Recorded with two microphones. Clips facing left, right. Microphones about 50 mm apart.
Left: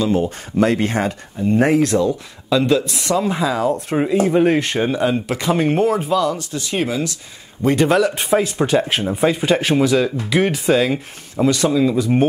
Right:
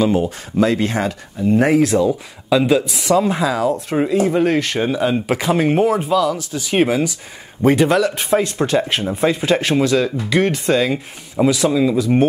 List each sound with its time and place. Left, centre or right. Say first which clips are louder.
0.0 s speech: right 2 dB; centre
0.7 s speech: even; centre
5.2 s speech: right 3 dB; centre
5.5 s speech: right 1 dB; centre
6.7 s speech: right 5 dB; right
7.6 s speech: right 1 dB; centre